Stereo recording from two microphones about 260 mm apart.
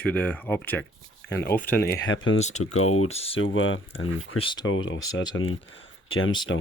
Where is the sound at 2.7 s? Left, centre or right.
Left.